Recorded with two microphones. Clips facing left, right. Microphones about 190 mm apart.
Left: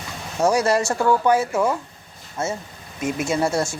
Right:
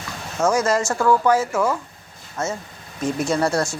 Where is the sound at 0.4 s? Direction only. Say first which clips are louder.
Left 1 dB; 35° left (ahead or behind).